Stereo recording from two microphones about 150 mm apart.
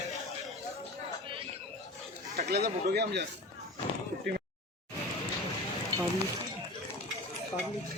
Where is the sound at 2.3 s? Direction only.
90° right.